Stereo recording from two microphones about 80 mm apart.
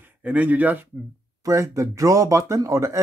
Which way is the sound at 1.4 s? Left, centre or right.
Right.